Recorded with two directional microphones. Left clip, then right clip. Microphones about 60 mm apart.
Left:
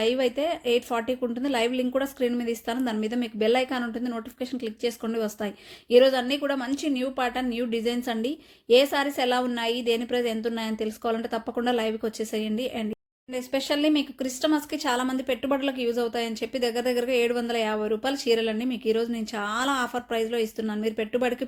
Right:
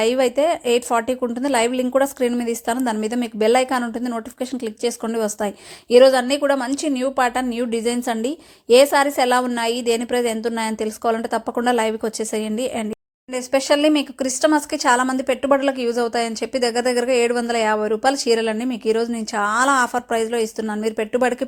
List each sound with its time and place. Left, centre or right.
0.0 s a woman's voice: right